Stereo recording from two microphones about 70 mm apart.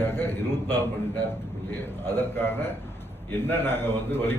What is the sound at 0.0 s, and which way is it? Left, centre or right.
A man's voice, left.